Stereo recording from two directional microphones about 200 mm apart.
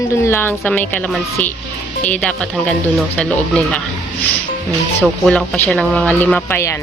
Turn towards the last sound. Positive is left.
turn(degrees=10)  # may be behind; listen again after turning